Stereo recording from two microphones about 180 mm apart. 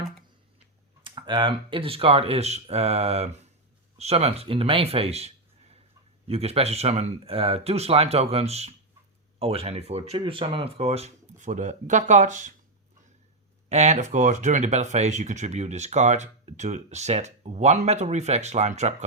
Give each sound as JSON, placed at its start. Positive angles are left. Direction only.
{"t": 1.0, "sound": "speech", "side_deg": -25}
{"t": 13.7, "sound": "speech", "side_deg": -40}